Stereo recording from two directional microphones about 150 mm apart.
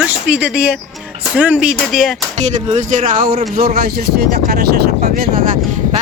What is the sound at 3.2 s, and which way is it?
Speech, 75° right (ahead or behind).